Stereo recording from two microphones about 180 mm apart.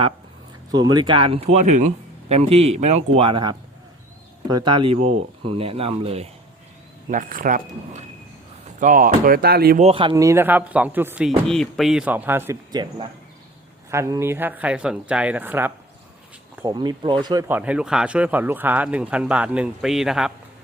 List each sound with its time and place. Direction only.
0.7 s speech: 20° right (ahead or behind)
7.1 s speech: 50° right (ahead or behind)
9.7 s speech: 35° right (ahead or behind)
10.2 s a man's voice: 10° right (ahead or behind)
12.7 s a man's voice: 25° right (ahead or behind)
16.6 s speech: 25° right (ahead or behind)
17.5 s a man's voice: 5° right (ahead or behind)